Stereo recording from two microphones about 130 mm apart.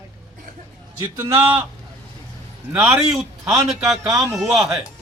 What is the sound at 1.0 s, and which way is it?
Speech, 20° right (ahead or behind).